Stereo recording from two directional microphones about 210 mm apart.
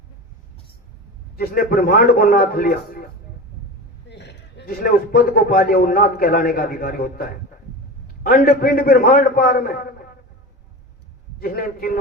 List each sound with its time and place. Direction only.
1.4 s a man's voice: 45° left (ahead or behind)
4.1 s a man's voice: 55° left (ahead or behind)
11.3 s a man's voice: 45° left (ahead or behind)